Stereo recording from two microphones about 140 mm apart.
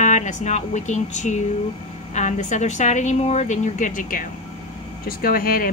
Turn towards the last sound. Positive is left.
turn(degrees=90)